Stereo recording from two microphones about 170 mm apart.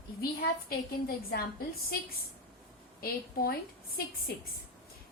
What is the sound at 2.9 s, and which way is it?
Speech, 60° left (ahead or behind).